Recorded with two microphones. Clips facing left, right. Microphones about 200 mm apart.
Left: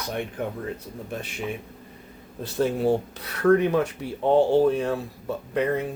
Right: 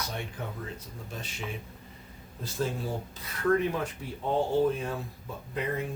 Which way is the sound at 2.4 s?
70° left (ahead or behind).